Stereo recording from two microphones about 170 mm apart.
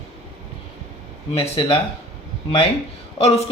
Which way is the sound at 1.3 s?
35° left (ahead or behind).